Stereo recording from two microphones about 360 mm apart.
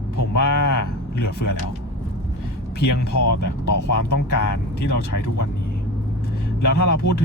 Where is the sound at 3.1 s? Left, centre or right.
Left.